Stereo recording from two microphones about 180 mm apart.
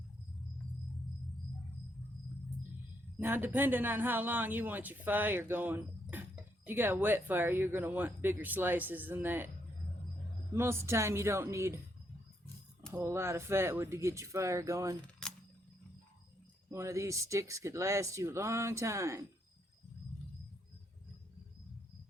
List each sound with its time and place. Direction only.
3.2 s speech: 10° right (ahead or behind)
10.5 s speech: 15° right (ahead or behind)
12.9 s speech: 15° right (ahead or behind)
15.2 s a sound: 5° left (ahead or behind)
16.7 s speech: 15° right (ahead or behind)